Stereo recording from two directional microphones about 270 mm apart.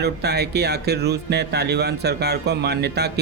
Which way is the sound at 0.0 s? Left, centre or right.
Right.